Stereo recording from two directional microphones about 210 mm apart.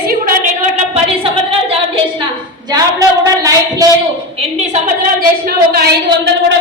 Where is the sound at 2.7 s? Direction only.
15° right (ahead or behind).